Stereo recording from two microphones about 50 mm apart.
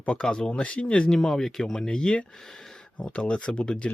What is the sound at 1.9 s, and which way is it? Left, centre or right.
Speech, centre.